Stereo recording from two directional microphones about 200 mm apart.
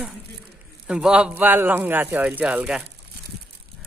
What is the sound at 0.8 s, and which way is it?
Speech, 5° right (ahead or behind).